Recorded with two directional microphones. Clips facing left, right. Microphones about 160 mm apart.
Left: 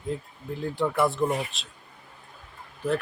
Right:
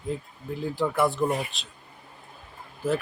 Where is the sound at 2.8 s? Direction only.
Centre (ahead or behind).